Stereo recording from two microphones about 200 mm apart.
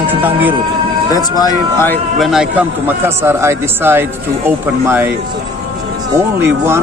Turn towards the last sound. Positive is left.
turn(degrees=-10)  # may be behind; listen again after turning